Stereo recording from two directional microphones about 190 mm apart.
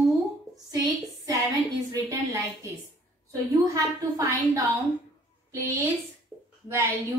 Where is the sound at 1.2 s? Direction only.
15° right (ahead or behind).